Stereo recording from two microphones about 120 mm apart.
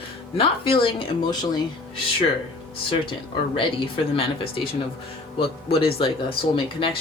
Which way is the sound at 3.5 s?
50° left (ahead or behind).